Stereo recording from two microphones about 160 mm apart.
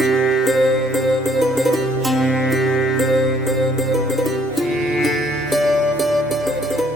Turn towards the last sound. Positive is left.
turn(degrees=0)  # may be behind; listen again after turning